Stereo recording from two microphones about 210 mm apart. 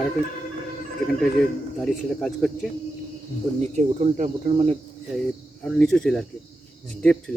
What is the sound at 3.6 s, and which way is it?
Speech, 35° right (ahead or behind).